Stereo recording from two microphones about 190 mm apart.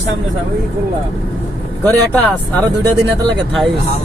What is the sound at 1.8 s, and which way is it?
Speech, 10° left (ahead or behind).